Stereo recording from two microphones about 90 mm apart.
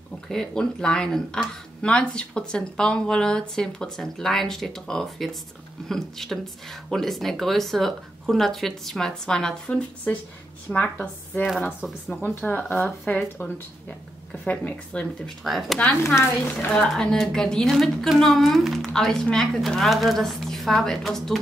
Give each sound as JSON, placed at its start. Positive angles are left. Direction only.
{"t": 0.3, "sound": "a woman's voice", "side_deg": 5}
{"t": 15.4, "sound": "a woman's voice", "side_deg": 0}
{"t": 16.8, "sound": "a woman's voice", "side_deg": 5}